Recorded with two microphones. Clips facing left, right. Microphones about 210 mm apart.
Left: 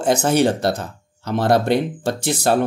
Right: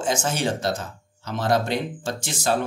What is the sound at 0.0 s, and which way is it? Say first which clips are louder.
Speech: left 8 dB; 60° left (ahead or behind).